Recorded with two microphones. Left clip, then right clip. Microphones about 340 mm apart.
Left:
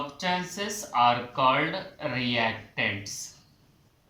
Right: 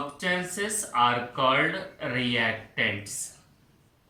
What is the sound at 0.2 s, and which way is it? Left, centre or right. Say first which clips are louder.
Speech: right 1 dB; centre.